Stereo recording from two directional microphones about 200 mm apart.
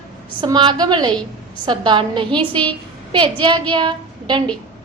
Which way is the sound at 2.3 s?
5° left (ahead or behind).